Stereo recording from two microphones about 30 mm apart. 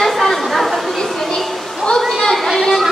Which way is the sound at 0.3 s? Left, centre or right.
Centre.